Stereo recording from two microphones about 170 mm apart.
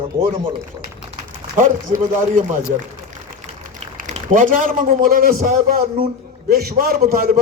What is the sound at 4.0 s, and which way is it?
A man's voice, 50° right (ahead or behind).